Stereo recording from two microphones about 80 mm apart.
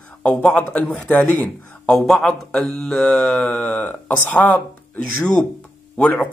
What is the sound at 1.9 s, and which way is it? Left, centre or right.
Speech, centre.